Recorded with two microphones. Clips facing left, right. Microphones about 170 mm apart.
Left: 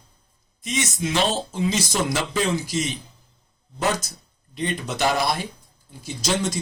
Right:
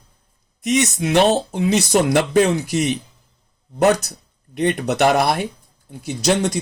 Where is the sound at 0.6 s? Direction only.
70° right (ahead or behind).